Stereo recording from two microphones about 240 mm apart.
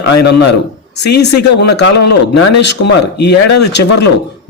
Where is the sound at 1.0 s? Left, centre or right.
Left.